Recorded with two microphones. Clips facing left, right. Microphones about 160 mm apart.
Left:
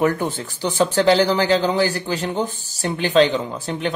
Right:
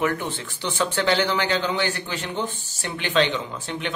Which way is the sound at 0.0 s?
40° left (ahead or behind).